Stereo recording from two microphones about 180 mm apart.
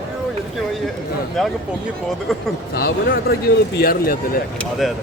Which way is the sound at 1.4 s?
Centre (ahead or behind).